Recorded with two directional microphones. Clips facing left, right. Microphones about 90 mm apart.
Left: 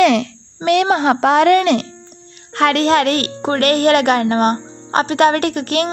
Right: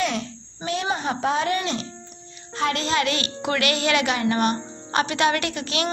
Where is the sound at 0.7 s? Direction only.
75° left (ahead or behind).